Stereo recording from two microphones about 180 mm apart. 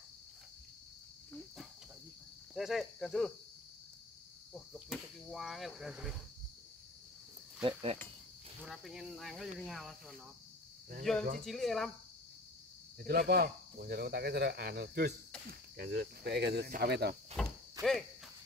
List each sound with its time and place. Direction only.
2.5 s speech: centre (ahead or behind)
4.6 s speech: centre (ahead or behind)
8.6 s speech: centre (ahead or behind)
11.3 s speech: centre (ahead or behind)
13.0 s speech: 60° right (ahead or behind)
17.4 s a sound: 5° left (ahead or behind)
17.8 s speech: 20° right (ahead or behind)